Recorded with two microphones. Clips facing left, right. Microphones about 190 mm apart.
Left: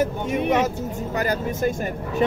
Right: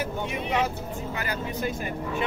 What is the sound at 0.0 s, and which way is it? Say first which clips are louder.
Speech: left 8 dB; 45° left (ahead or behind).